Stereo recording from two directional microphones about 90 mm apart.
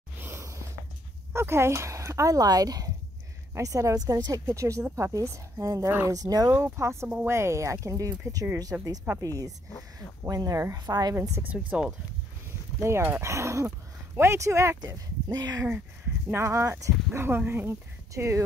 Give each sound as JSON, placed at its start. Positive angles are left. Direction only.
{"t": 0.2, "sound": "a sound", "side_deg": -30}
{"t": 1.3, "sound": "speech", "side_deg": -30}
{"t": 6.5, "sound": "speech", "side_deg": -30}
{"t": 8.7, "sound": "speech", "side_deg": -25}
{"t": 9.2, "sound": "a woman's voice", "side_deg": -40}
{"t": 11.1, "sound": "speech", "side_deg": -25}
{"t": 12.8, "sound": "speech", "side_deg": -30}
{"t": 16.3, "sound": "speech", "side_deg": -30}